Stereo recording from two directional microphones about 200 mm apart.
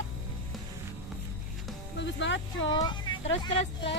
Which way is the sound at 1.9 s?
65° left (ahead or behind).